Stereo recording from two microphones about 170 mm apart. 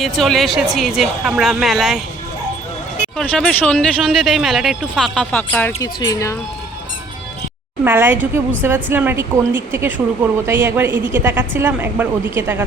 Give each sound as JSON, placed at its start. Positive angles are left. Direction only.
{"t": 0.0, "sound": "speech", "side_deg": 0}
{"t": 3.2, "sound": "speech", "side_deg": 5}
{"t": 5.8, "sound": "speech", "side_deg": 20}
{"t": 7.9, "sound": "a woman's voice", "side_deg": -10}